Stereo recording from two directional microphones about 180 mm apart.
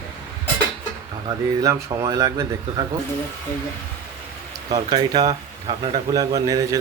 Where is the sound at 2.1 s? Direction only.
20° right (ahead or behind).